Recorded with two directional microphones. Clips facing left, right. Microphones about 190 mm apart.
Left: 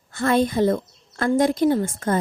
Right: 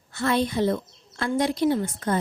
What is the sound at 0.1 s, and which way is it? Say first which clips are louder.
A woman's voice: left 4 dB; 50° left (ahead or behind).